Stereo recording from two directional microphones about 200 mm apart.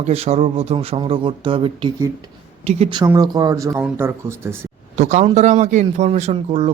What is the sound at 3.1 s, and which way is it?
Speech, 20° right (ahead or behind).